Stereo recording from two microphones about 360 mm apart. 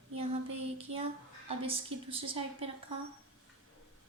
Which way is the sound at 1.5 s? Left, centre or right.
Centre.